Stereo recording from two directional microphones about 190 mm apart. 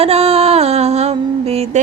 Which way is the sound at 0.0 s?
30° right (ahead or behind).